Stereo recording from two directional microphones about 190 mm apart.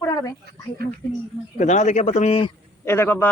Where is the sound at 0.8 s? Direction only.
55° right (ahead or behind).